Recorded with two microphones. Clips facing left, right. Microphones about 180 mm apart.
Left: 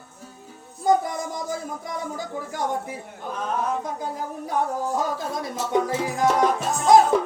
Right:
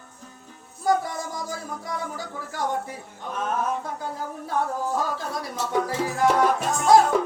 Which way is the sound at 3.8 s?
15° left (ahead or behind).